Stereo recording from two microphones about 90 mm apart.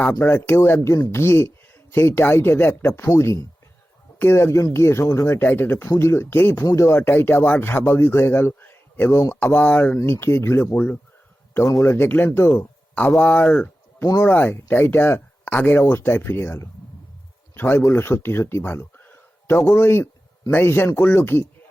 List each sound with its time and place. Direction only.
0.0 s speech: 20° left (ahead or behind)
11.8 s speech: 25° left (ahead or behind)
12.9 s speech: 15° left (ahead or behind)